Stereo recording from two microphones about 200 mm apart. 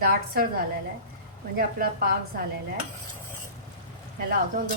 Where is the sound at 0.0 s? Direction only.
45° right (ahead or behind).